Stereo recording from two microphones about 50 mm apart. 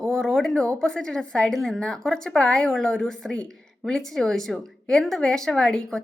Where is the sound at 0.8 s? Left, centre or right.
Centre.